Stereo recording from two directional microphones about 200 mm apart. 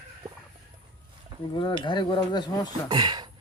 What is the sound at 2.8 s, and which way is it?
Speech, 20° right (ahead or behind).